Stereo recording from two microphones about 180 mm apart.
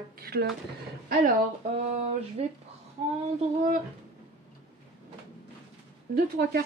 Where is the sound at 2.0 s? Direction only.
35° right (ahead or behind).